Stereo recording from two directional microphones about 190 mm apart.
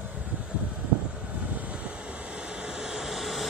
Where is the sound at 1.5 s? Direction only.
5° right (ahead or behind).